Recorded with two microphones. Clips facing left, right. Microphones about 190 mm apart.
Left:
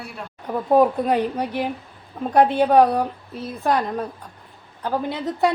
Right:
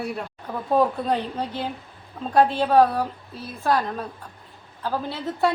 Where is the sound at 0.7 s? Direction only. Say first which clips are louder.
Left 4 dB; 15° left (ahead or behind).